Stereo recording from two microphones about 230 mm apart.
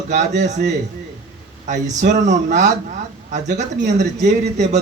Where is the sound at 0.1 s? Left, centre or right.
Right.